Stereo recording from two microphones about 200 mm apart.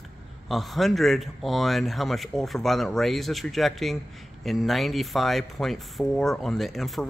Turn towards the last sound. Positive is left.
turn(degrees=0)  # may be behind; listen again after turning